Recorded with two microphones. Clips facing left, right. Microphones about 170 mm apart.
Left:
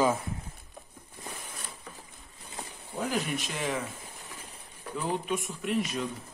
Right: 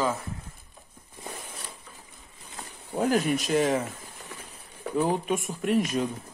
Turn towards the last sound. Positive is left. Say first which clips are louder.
# right 5 dB
turn(degrees=-45)  # may be behind; listen again after turning